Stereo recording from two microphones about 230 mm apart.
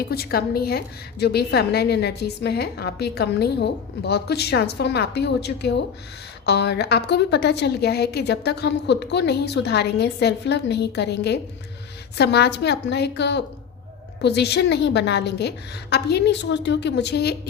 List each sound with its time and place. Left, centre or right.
0.1 s a woman's voice: left